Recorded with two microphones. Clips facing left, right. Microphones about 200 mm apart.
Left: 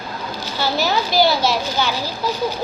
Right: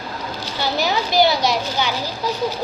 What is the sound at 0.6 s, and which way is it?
A woman's voice, 20° right (ahead or behind).